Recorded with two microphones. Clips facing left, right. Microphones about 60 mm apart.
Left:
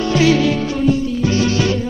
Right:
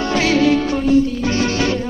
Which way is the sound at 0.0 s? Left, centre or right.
Right.